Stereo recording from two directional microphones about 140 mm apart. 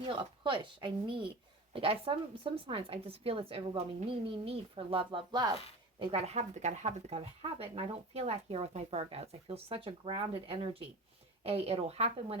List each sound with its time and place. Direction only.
0.0 s a woman's voice: 35° right (ahead or behind)
6.0 s speech: 45° right (ahead or behind)